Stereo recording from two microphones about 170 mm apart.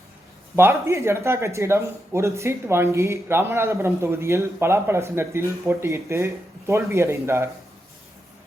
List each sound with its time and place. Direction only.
0.5 s speech: 15° right (ahead or behind)